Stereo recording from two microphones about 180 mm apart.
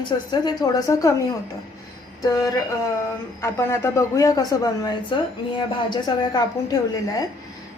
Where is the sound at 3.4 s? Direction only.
15° left (ahead or behind).